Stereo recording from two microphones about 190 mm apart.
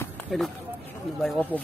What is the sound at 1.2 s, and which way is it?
Speech, 5° left (ahead or behind).